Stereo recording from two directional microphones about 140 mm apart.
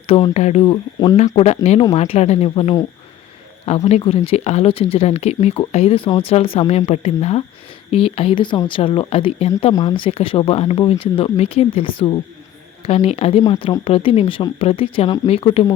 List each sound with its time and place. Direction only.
0.3 s speech: 50° left (ahead or behind)
3.8 s speech: 45° left (ahead or behind)